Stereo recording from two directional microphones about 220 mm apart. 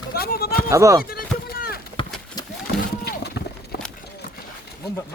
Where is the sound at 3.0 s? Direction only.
45° left (ahead or behind).